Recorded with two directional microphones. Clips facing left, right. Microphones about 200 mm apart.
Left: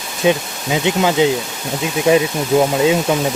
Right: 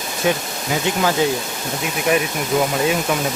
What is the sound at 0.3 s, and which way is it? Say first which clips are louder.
Speech: left 5 dB; 20° left (ahead or behind).